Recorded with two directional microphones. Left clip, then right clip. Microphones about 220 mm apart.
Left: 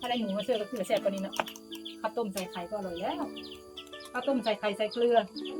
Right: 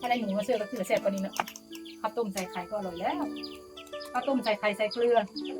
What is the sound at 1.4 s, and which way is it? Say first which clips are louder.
Music: even; 35° left (ahead or behind).